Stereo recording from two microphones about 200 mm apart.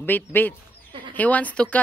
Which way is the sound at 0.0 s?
10° left (ahead or behind).